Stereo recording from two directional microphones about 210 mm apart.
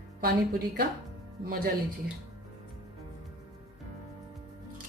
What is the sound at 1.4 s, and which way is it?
Speech, 45° right (ahead or behind).